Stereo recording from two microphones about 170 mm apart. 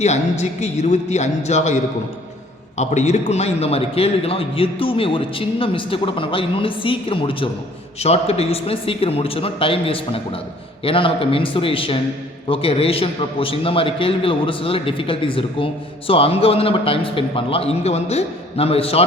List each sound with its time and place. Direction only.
0.0 s a man's voice: 40° left (ahead or behind)